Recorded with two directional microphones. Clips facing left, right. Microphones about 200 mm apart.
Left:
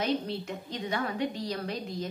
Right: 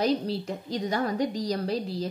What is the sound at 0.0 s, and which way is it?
A woman's voice, 35° right (ahead or behind).